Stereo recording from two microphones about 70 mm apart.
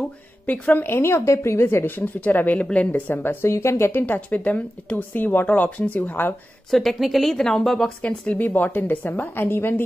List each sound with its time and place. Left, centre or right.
0.5 s a woman's voice: left
2.1 s speech: left
3.4 s a woman's voice: left
4.0 s speech: left
6.7 s a woman's voice: centre
8.0 s speech: left